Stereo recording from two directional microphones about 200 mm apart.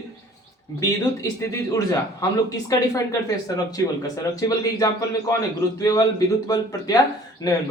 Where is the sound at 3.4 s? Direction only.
20° left (ahead or behind).